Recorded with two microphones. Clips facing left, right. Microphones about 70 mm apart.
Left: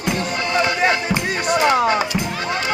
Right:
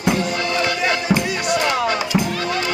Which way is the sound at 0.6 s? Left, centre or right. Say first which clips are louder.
Left 2 dB; left.